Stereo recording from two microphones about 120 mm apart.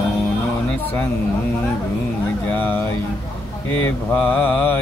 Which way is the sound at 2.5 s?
15° left (ahead or behind).